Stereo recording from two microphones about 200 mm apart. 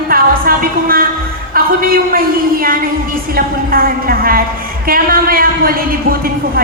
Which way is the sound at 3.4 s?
45° right (ahead or behind).